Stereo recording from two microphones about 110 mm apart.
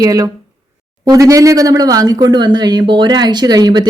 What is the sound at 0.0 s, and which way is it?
Speech, 35° right (ahead or behind).